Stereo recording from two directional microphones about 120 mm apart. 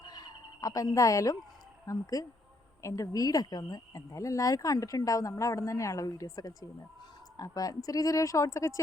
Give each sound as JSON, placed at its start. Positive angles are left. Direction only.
{"t": 0.0, "sound": "fowl", "side_deg": 35}
{"t": 1.9, "sound": "speech", "side_deg": 30}